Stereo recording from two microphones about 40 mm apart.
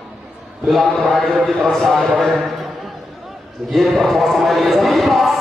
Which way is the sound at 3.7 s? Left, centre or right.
Centre.